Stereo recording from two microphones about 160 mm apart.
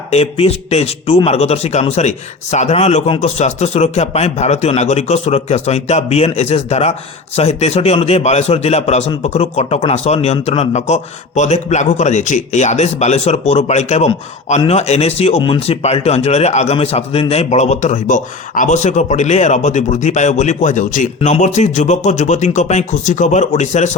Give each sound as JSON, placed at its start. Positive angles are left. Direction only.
{"t": 0.1, "sound": "a man's voice", "side_deg": 40}